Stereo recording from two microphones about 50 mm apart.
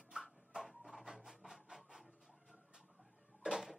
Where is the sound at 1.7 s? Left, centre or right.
Centre.